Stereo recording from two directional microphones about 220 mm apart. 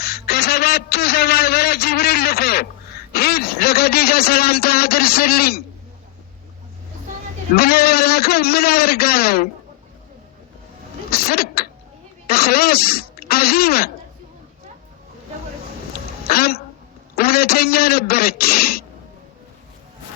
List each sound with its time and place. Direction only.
0.0 s a man's voice: 45° left (ahead or behind)
7.5 s speech: 45° left (ahead or behind)
11.1 s speech: 45° left (ahead or behind)
16.2 s a sound: 45° left (ahead or behind)
17.2 s speech: 45° left (ahead or behind)